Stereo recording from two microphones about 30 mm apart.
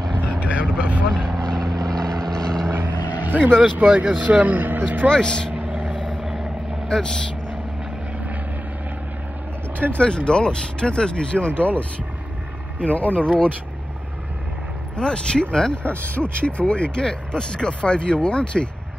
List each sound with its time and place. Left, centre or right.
0.3 s vehicle: right
1.1 s vehicle: left
2.8 s vehicle: right
3.8 s speech: right
5.1 s speech: left
5.5 s vehicle: right
6.9 s speech: left
9.9 s speech: left
12.7 s speech: right
15.0 s speech: left
15.7 s speech: left